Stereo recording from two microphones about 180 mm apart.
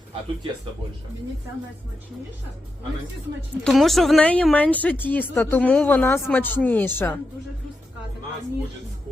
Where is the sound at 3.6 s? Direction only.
Centre (ahead or behind).